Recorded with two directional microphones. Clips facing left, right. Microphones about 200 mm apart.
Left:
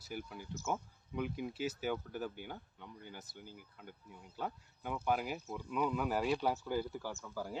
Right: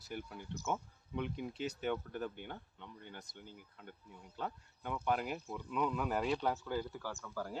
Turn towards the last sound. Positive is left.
turn(degrees=5)  # may be behind; listen again after turning